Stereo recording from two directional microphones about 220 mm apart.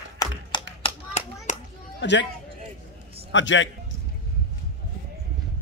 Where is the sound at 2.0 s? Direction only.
55° left (ahead or behind).